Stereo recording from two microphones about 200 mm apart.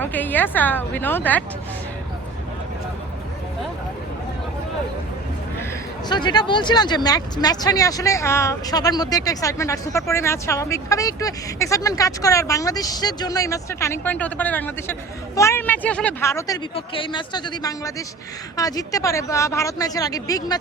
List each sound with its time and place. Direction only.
0.0 s speech: 10° left (ahead or behind)
6.1 s speech: 20° left (ahead or behind)
16.7 s speech: 25° left (ahead or behind)